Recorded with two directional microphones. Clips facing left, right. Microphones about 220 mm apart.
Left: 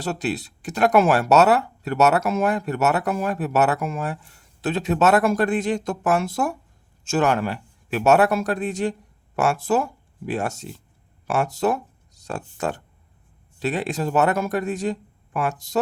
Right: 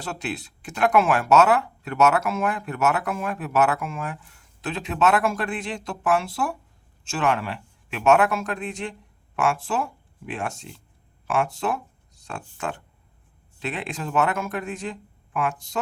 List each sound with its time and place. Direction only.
0.0 s speech: 40° left (ahead or behind)